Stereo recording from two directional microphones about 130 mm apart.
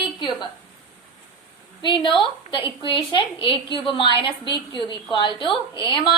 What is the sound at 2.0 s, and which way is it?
A woman's voice, 40° left (ahead or behind).